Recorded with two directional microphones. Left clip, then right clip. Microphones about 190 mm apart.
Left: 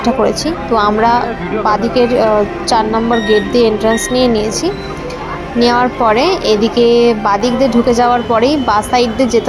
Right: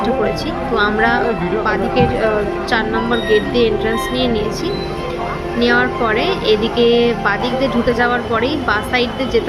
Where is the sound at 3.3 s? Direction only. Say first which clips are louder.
Left 3 dB; 25° left (ahead or behind).